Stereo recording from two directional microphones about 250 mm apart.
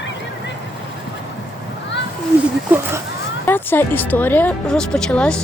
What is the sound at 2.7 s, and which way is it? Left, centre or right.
Speech, centre.